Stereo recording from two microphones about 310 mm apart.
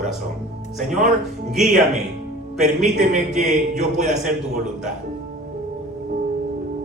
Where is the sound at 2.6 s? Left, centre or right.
Right.